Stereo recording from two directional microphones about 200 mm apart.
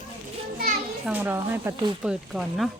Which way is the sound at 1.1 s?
10° right (ahead or behind).